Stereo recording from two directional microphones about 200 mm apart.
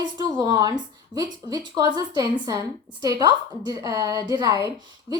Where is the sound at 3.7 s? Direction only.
20° right (ahead or behind).